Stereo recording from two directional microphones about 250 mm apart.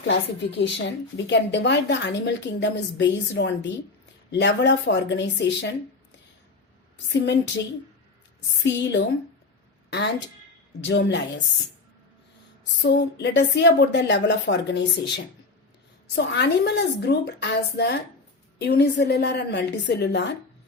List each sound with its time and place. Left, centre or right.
0.1 s a woman's voice: left
7.1 s a woman's voice: left
8.6 s a woman's voice: left
12.8 s a woman's voice: left